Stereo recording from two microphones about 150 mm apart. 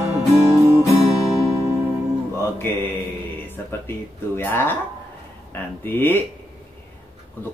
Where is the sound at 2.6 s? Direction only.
15° left (ahead or behind).